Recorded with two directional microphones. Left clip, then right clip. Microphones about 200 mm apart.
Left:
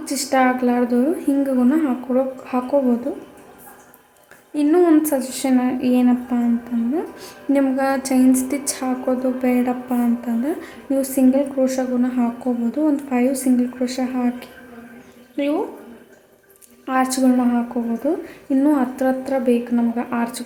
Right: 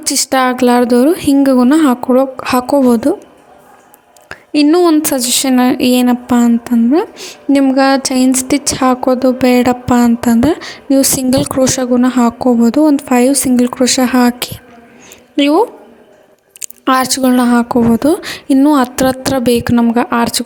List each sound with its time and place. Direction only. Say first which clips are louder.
0.0 s a woman's voice: right 6 dB; 50° right (ahead or behind)
4.3 s a woman's voice: right 8 dB; 40° right (ahead or behind)
7.2 s a woman's voice: right 7 dB; 30° right (ahead or behind); by 20.4 s 45° right (ahead or behind)